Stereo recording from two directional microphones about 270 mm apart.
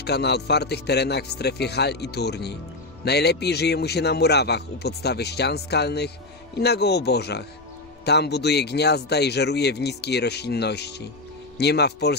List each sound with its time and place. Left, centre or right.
0.0 s a man's voice: left